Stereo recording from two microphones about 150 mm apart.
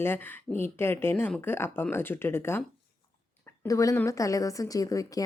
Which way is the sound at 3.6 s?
20° left (ahead or behind).